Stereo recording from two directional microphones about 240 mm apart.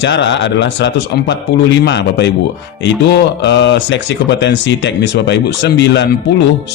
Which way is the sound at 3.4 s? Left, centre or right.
Left.